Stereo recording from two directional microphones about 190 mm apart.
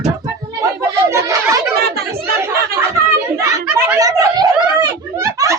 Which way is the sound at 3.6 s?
5° right (ahead or behind).